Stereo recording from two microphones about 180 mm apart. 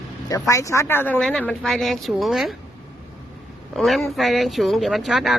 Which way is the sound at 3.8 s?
Centre (ahead or behind).